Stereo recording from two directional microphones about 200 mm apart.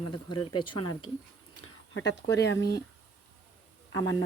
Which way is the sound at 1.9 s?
60° left (ahead or behind).